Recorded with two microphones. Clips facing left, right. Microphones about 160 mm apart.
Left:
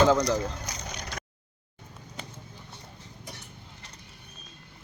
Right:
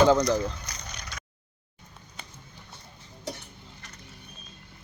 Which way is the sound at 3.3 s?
80° right.